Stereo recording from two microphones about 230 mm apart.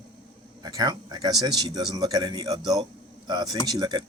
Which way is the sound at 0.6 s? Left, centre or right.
Centre.